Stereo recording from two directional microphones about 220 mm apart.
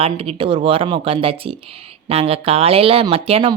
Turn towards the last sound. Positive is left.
turn(degrees=-25)  # may be behind; listen again after turning